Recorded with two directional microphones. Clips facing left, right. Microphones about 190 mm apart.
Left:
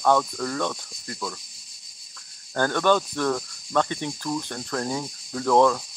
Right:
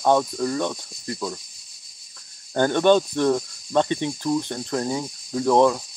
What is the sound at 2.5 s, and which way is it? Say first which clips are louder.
Cricket: right 4 dB; 20° right (ahead or behind).